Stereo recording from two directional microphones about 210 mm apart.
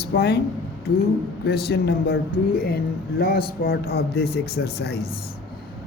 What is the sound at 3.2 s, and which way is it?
Speech, 45° left (ahead or behind).